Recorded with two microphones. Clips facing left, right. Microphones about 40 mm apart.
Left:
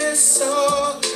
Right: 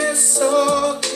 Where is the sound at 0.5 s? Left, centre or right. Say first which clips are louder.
Right 1 dB; centre.